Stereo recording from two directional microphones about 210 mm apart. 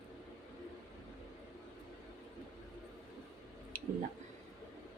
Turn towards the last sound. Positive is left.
turn(degrees=-45)  # may be behind; listen again after turning